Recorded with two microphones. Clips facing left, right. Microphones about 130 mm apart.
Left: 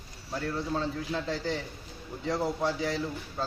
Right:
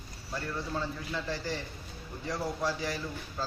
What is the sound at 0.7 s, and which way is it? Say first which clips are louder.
Speech: left 3 dB; 20° left (ahead or behind).